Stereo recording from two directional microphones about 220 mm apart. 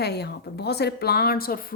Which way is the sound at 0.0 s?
50° left (ahead or behind).